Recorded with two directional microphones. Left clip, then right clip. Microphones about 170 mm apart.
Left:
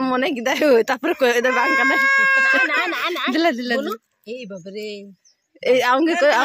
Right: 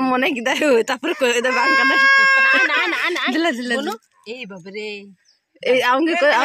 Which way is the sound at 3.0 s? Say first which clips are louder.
Right 2 dB; 50° right (ahead or behind).